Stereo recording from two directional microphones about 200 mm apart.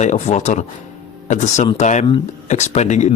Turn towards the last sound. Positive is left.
turn(degrees=35)  # may be behind; listen again after turning